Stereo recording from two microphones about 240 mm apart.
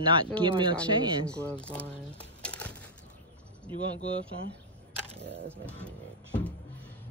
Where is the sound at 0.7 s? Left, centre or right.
Centre.